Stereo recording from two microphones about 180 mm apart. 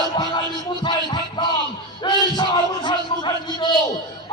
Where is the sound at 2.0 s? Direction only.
25° left (ahead or behind).